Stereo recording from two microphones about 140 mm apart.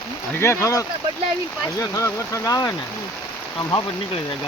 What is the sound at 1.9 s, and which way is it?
Speech, 20° left (ahead or behind).